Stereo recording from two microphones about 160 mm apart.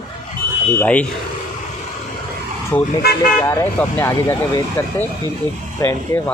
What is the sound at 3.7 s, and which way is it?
Speech, 10° left (ahead or behind).